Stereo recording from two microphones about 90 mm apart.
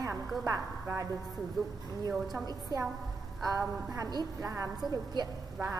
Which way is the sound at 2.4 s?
40° right (ahead or behind).